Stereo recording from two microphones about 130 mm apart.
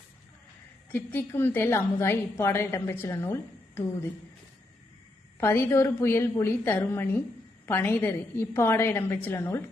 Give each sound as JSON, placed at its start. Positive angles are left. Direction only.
{"t": 0.9, "sound": "a woman's voice", "side_deg": 15}
{"t": 5.4, "sound": "a woman's voice", "side_deg": 20}